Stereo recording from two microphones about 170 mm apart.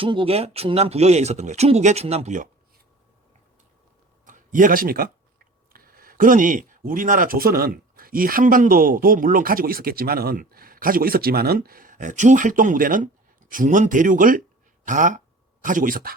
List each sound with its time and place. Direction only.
0.0 s speech: 30° right (ahead or behind)
4.3 s speech: 50° right (ahead or behind)